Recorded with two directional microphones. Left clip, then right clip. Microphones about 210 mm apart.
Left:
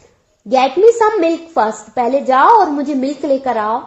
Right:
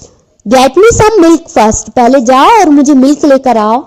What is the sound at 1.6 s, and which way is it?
A woman's voice, 25° right (ahead or behind).